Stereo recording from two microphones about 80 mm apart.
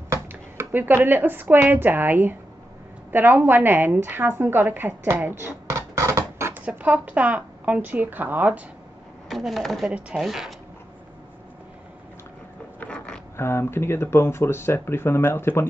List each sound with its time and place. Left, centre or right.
0.3 s a woman's voice: right
5.7 s a sound: right
6.6 s a woman's voice: centre
9.3 s speech: centre
9.8 s speech: centre
12.8 s a sound: centre
13.4 s speech: left